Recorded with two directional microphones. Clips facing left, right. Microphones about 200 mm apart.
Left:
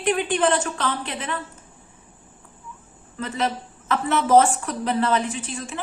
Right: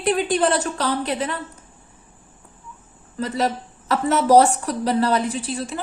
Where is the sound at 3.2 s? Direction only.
40° right (ahead or behind).